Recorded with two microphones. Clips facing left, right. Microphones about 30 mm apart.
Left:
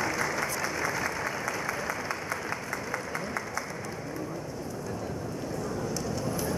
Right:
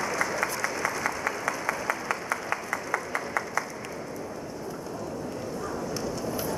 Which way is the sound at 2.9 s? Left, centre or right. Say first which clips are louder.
Right 5 dB; right.